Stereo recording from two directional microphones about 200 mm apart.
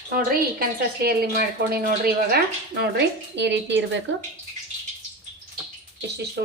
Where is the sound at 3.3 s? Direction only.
60° right (ahead or behind).